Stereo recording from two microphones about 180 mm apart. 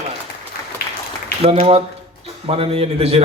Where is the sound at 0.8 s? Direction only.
60° left (ahead or behind).